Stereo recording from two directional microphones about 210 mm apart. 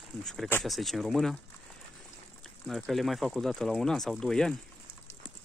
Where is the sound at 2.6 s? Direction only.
Centre (ahead or behind).